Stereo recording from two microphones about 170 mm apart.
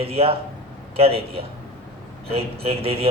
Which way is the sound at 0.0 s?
35° right (ahead or behind).